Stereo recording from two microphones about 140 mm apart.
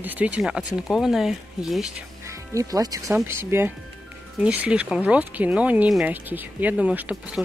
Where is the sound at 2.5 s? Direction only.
25° right (ahead or behind).